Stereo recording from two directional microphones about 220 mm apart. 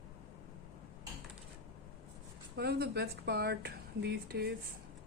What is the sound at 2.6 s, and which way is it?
A woman's voice, 45° right (ahead or behind).